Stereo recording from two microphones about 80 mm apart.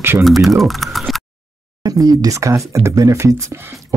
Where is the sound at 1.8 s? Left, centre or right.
Right.